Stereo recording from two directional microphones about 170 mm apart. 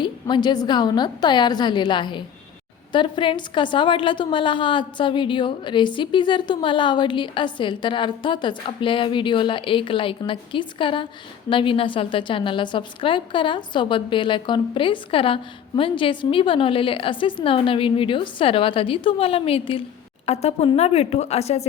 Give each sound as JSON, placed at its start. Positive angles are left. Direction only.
{"t": 0.0, "sound": "a woman's voice", "side_deg": 25}